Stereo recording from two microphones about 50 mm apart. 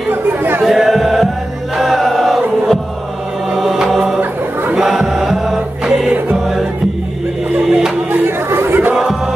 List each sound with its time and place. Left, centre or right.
0.1 s chatter: right
0.7 s chant: centre
3.5 s music: centre
4.7 s chant: centre
5.2 s mantra: centre
7.5 s music: centre
8.5 s crowd: right